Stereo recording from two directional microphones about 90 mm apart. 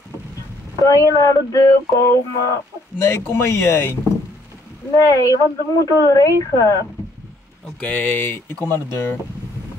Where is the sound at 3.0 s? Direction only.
25° left (ahead or behind).